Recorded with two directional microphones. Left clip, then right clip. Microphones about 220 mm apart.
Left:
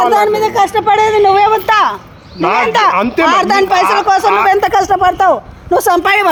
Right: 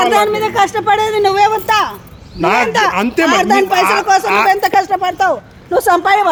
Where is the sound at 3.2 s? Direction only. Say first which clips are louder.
Left 1 dB; 15° left (ahead or behind).